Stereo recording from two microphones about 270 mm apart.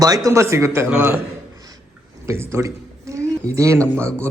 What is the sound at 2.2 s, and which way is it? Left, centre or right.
A man's voice, centre.